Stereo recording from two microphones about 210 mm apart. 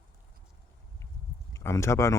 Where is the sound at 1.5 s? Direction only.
15° left (ahead or behind).